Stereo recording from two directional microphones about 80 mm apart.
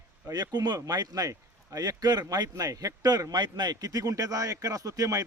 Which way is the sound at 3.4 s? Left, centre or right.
Right.